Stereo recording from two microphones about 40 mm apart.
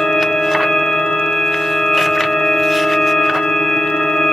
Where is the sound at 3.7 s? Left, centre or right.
Centre.